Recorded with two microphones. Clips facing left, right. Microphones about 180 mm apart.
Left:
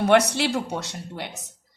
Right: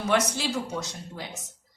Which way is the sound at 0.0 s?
65° left (ahead or behind).